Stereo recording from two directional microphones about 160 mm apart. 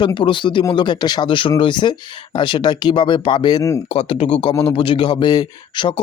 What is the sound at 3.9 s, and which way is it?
Speech, 40° left (ahead or behind).